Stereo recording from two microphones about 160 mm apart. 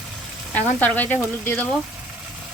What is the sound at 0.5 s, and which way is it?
Speech, 10° left (ahead or behind).